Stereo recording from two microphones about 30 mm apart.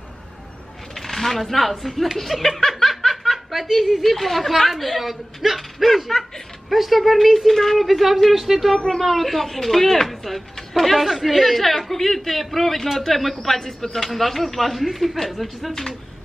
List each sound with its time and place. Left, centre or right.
0.9 s speech: centre
2.9 s snicker: centre
3.7 s speech: centre
4.0 s speech: centre
8.7 s speech: centre
9.0 s speech: centre
13.7 s speech: centre
14.0 s speech: centre